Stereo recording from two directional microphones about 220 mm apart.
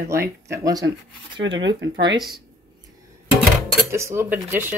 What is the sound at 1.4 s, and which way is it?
Speech, 55° right (ahead or behind).